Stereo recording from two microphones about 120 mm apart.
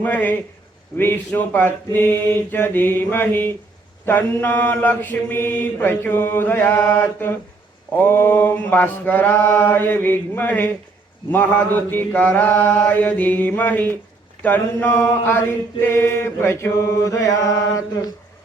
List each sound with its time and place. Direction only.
0.0 s mantra: 15° left (ahead or behind)